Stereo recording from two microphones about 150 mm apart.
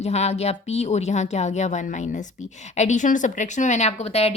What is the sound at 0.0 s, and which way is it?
Speech, 45° left (ahead or behind).